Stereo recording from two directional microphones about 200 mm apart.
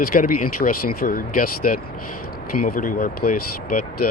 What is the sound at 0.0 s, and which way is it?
Speech, 45° left (ahead or behind).